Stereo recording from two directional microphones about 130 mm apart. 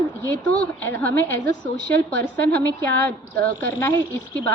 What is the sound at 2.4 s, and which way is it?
A woman's voice, 10° left (ahead or behind).